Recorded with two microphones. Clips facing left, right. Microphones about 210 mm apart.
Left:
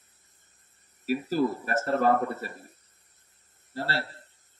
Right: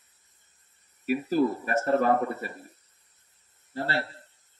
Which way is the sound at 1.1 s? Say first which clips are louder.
Right 2 dB; 40° left (ahead or behind).